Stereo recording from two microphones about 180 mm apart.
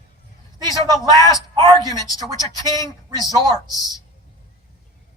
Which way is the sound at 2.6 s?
20° left (ahead or behind).